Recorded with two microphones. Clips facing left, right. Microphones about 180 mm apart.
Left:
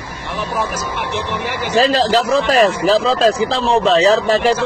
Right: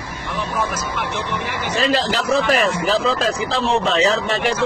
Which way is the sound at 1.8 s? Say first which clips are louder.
Left 6 dB; 35° left (ahead or behind).